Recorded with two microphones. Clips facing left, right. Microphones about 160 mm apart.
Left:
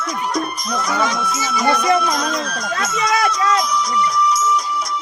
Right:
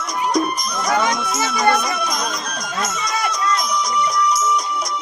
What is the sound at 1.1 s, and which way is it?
Music, 45° right (ahead or behind).